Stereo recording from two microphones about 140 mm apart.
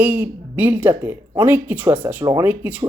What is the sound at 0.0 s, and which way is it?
Speech, 15° right (ahead or behind).